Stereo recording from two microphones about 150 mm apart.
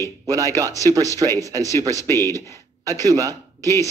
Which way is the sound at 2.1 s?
15° left (ahead or behind).